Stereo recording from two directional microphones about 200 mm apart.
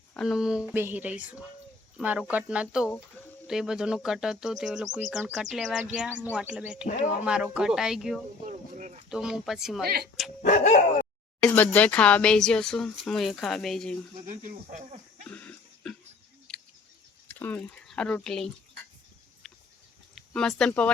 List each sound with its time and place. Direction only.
0.1 s speech: centre (ahead or behind)
6.8 s bow-wow: 35° left (ahead or behind)
7.3 s speech: 5° right (ahead or behind)
8.4 s a sound: 35° right (ahead or behind)
9.0 s speech: 5° right (ahead or behind)
9.8 s speech: 50° right (ahead or behind)
10.4 s bow-wow: 35° left (ahead or behind)
11.3 s speech: 5° left (ahead or behind)
14.3 s speech: 40° right (ahead or behind)
15.2 s cough: 5° left (ahead or behind)
16.5 s scissors: 5° left (ahead or behind)
17.2 s speech: 10° left (ahead or behind)
20.1 s speech: 5° left (ahead or behind)